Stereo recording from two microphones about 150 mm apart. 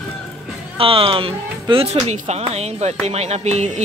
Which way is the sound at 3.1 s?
45° right (ahead or behind).